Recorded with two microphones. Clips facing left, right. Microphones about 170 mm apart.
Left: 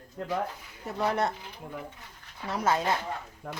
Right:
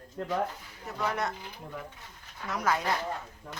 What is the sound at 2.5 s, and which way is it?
Speech, 25° left (ahead or behind).